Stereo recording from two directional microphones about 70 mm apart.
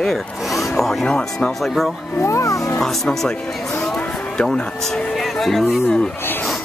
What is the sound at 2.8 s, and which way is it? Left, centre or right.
Speech, centre.